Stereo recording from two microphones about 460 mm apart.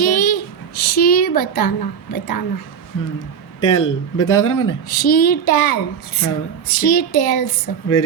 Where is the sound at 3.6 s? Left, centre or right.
Left.